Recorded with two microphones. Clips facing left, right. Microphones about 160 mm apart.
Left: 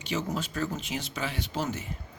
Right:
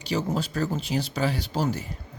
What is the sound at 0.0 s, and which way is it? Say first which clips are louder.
Speech: right 4 dB; 35° right (ahead or behind).